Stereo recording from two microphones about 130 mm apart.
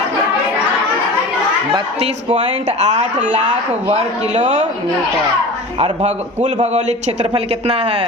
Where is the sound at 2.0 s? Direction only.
55° right (ahead or behind).